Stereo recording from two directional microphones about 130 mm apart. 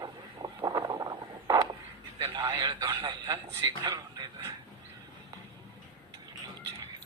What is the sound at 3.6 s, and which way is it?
Speech, 30° right (ahead or behind).